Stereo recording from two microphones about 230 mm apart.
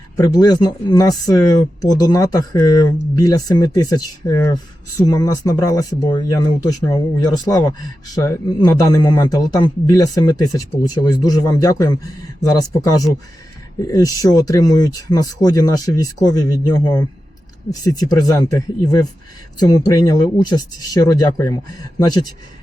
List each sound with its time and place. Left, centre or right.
0.2 s speech: centre